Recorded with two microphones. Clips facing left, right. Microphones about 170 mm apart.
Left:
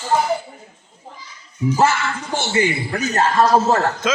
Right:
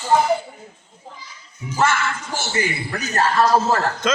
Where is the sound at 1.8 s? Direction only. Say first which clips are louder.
Right 1 dB; 30° left (ahead or behind).